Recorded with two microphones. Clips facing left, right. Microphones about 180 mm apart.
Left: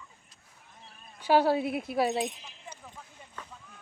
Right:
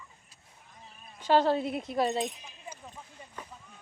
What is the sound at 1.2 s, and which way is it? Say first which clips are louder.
A child's voice: left 1 dB; 10° left (ahead or behind).